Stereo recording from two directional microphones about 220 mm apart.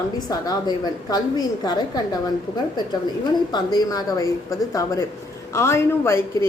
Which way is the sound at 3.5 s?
20° left (ahead or behind).